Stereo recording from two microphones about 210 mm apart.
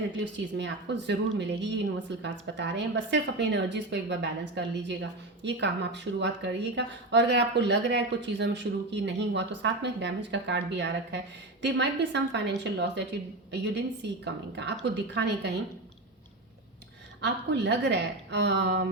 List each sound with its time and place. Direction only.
0.3 s a woman's voice: 55° right (ahead or behind)
17.2 s a woman's voice: 55° right (ahead or behind)